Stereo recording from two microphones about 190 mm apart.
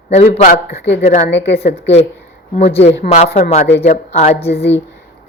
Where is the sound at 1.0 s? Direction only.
40° left (ahead or behind).